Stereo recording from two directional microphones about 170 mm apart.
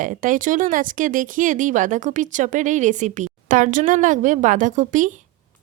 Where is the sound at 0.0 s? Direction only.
50° right (ahead or behind).